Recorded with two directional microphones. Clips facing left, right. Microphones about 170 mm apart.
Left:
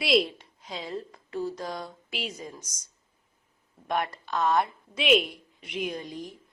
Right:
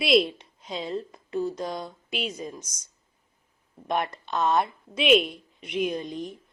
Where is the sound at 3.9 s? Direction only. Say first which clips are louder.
Right 1 dB; 25° right (ahead or behind).